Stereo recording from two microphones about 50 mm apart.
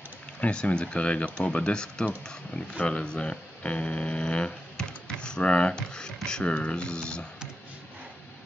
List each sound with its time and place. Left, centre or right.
0.4 s speech: left